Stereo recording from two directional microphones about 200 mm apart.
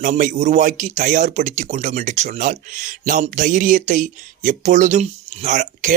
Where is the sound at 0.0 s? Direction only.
40° right (ahead or behind).